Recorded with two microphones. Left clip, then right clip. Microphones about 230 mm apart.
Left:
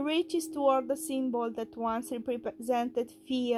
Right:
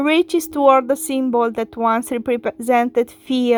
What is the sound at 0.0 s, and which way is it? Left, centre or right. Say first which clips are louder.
Speech: right 14 dB; right.